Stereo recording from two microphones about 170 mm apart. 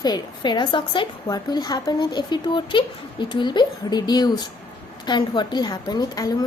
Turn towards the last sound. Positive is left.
turn(degrees=20)  # may be behind; listen again after turning